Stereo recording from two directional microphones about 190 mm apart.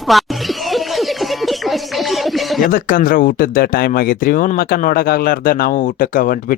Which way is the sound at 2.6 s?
50° left (ahead or behind).